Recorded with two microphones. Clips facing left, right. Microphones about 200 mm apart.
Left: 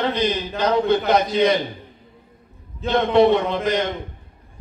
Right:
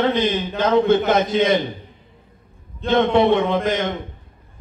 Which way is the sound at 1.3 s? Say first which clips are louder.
Even; 50° right (ahead or behind).